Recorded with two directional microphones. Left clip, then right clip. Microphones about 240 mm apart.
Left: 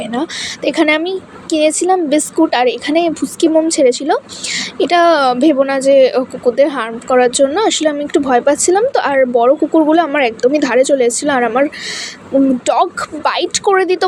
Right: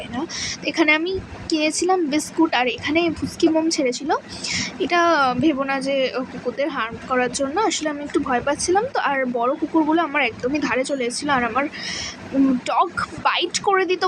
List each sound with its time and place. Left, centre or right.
0.1 s a woman's voice: centre